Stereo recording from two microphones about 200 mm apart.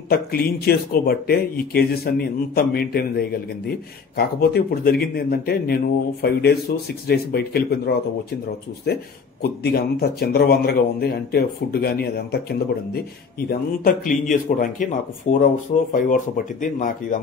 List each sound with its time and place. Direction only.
0.1 s speech: 50° left (ahead or behind)